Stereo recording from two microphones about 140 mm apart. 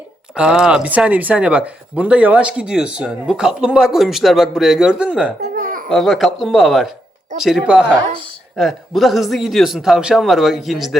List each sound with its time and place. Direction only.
0.3 s speech: 5° right (ahead or behind)
5.5 s babbling: 90° right
5.9 s a man's voice: centre (ahead or behind)